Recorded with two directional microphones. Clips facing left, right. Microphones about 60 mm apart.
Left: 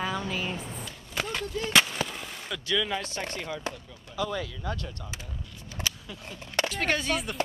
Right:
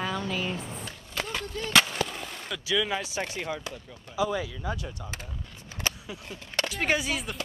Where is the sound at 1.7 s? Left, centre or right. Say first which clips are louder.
Right 1 dB; centre.